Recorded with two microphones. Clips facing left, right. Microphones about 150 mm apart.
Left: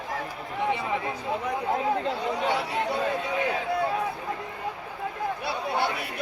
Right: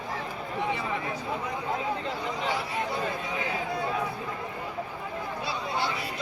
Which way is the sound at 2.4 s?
70° left (ahead or behind).